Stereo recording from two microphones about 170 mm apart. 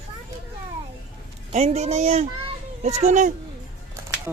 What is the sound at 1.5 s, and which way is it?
A child's voice, 40° right (ahead or behind).